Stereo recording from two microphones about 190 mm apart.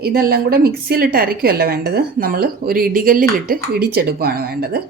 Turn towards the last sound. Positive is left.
turn(degrees=-55)  # may be behind; listen again after turning